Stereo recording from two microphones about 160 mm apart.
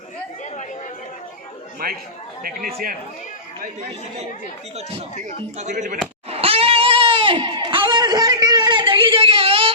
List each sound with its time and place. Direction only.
1.8 s a man's voice: 65° right (ahead or behind)
5.1 s speech: 50° right (ahead or behind)
6.3 s a sound: 35° right (ahead or behind)